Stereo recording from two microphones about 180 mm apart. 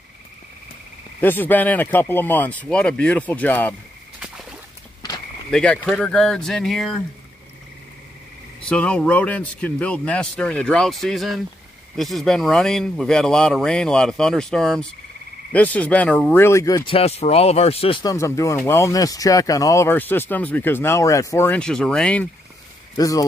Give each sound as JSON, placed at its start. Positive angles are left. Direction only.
{"t": 1.2, "sound": "speech", "side_deg": 10}
{"t": 5.5, "sound": "speech", "side_deg": 5}
{"t": 8.6, "sound": "speech", "side_deg": 5}
{"t": 16.9, "sound": "speech", "side_deg": 35}
{"t": 18.1, "sound": "speech", "side_deg": 15}
{"t": 22.9, "sound": "speech", "side_deg": 20}